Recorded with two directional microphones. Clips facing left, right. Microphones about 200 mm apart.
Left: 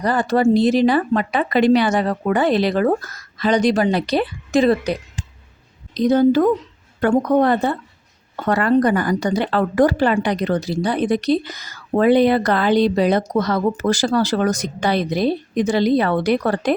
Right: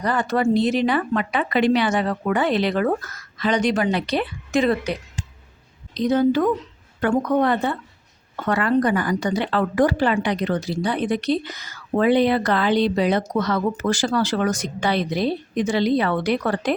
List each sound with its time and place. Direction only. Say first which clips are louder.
0.0 s speech: left 4 dB; 35° left (ahead or behind)